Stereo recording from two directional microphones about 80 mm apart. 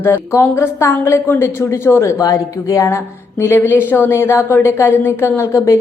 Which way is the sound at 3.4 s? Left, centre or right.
Left.